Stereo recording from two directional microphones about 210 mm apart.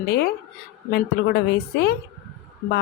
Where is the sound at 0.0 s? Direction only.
45° left (ahead or behind).